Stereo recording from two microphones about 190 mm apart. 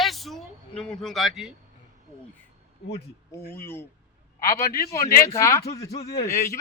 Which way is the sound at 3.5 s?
10° left (ahead or behind).